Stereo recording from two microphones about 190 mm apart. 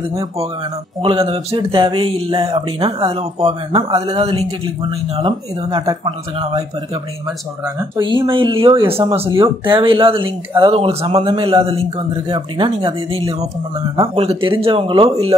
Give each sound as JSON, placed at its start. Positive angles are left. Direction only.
{"t": 1.0, "sound": "speech", "side_deg": -30}
{"t": 7.6, "sound": "speech", "side_deg": -20}